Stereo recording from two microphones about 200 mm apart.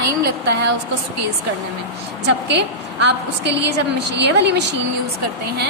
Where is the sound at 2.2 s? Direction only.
60° right (ahead or behind).